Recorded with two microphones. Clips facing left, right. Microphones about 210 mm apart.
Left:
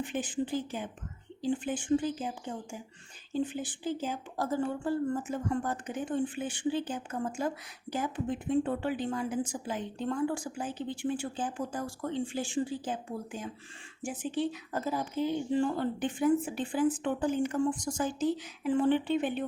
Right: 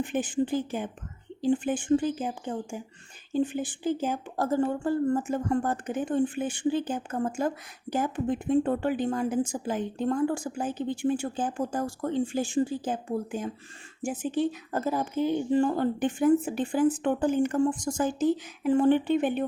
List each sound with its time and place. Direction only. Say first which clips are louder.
0.0 s a woman's voice: right 5 dB; 50° right (ahead or behind)